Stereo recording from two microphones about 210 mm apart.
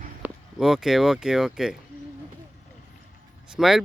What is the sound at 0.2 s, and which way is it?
Speech, centre (ahead or behind).